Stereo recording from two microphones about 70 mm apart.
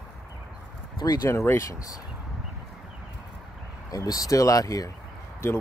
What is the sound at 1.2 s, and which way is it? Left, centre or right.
Speech, left.